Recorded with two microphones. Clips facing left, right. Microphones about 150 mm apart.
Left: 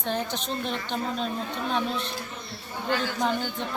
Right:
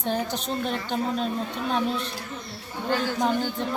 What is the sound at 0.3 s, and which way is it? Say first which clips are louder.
Speech: right 2 dB; 40° right (ahead or behind).